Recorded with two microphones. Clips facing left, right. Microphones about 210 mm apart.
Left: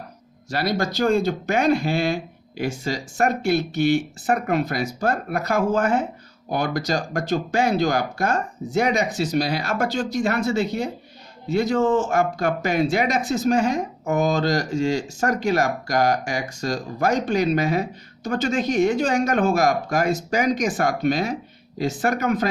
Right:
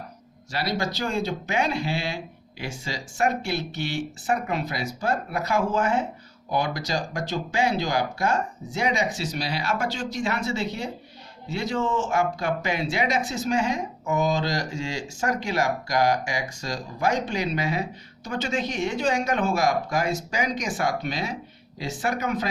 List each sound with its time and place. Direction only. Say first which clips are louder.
0.5 s speech: left 4 dB; 45° left (ahead or behind)